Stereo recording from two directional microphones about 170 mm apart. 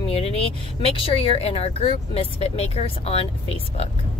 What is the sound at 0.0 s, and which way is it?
Speech, 35° left (ahead or behind).